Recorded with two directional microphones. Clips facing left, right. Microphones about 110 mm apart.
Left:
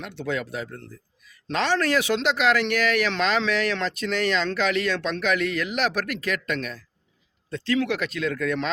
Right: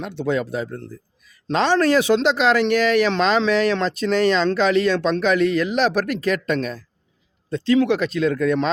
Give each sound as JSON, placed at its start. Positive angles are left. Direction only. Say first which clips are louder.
{"t": 0.0, "sound": "speech", "louder": "right 6 dB", "side_deg": -30}